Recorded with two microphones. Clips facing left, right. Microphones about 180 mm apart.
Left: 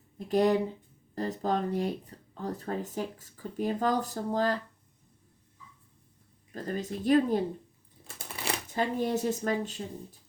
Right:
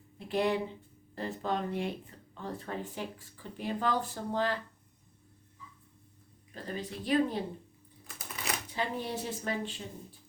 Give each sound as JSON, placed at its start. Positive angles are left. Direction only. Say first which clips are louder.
{"t": 0.2, "sound": "speech", "louder": "left 5 dB", "side_deg": 40}
{"t": 6.5, "sound": "a woman's voice", "louder": "left 5 dB", "side_deg": 45}
{"t": 8.0, "sound": "typewriter", "louder": "left 3 dB", "side_deg": 30}
{"t": 8.7, "sound": "a woman's voice", "louder": "left 7 dB", "side_deg": 45}